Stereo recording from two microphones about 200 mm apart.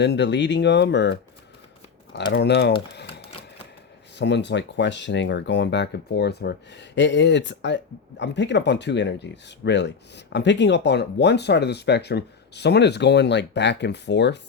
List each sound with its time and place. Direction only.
0.0 s speech: 60° left (ahead or behind)
2.3 s speech: 55° left (ahead or behind)
4.2 s speech: 60° left (ahead or behind)